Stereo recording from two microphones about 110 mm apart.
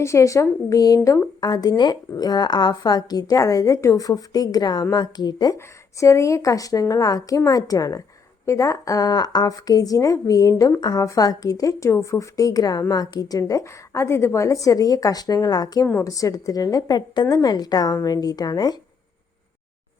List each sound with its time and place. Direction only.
0.0 s a woman's voice: 25° left (ahead or behind)
5.5 s a woman's voice: 25° left (ahead or behind)